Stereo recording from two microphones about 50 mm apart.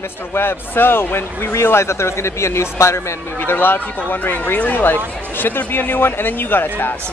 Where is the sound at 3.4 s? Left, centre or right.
Left.